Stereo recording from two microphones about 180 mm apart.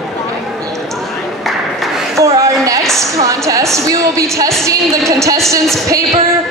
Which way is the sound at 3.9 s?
15° right (ahead or behind).